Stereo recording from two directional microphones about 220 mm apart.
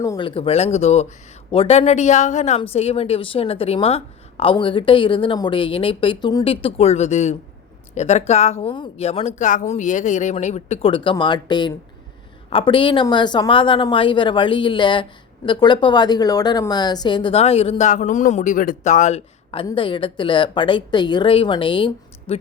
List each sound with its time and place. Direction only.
0.0 s a woman's voice: 20° left (ahead or behind)